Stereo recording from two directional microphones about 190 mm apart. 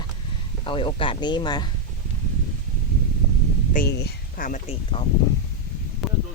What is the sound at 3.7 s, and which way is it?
Speech, 55° left (ahead or behind).